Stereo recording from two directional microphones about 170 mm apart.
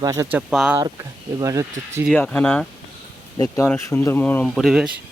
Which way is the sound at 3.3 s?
20° left (ahead or behind).